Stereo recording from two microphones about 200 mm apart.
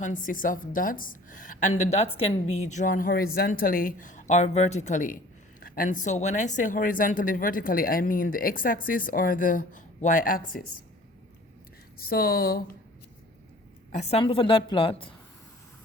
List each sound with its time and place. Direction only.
0.0 s a woman's voice: 40° left (ahead or behind)
11.9 s a woman's voice: 50° left (ahead or behind)
13.9 s a woman's voice: 30° left (ahead or behind)